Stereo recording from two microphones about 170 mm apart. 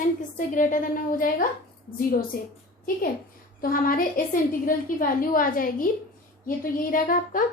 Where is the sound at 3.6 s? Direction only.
55° left (ahead or behind).